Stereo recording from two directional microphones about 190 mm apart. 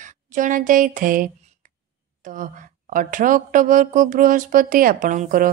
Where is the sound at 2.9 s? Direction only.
45° right (ahead or behind).